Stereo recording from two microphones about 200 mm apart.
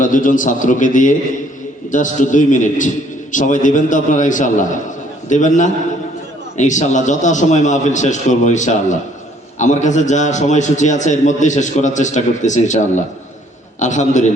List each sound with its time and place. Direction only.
0.0 s a man's voice: 40° left (ahead or behind)